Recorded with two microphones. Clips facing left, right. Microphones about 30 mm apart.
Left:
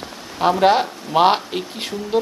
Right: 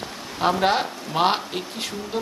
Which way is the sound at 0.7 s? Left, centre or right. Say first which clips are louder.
Left 6 dB; centre.